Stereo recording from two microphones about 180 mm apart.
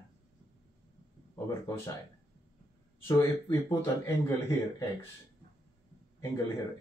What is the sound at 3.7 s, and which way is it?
Speech, 15° left (ahead or behind).